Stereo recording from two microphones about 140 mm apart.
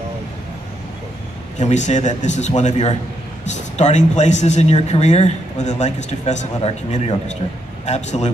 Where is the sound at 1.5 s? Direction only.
60° left (ahead or behind).